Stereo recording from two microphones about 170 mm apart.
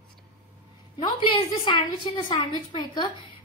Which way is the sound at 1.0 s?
25° left (ahead or behind).